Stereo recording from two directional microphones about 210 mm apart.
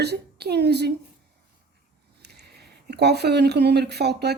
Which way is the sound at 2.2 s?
50° right (ahead or behind).